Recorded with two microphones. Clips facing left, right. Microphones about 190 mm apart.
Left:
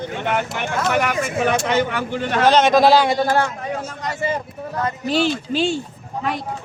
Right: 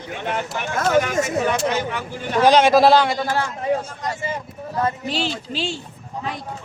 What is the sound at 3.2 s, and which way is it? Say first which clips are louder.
Speech: left 5 dB; 50° left (ahead or behind).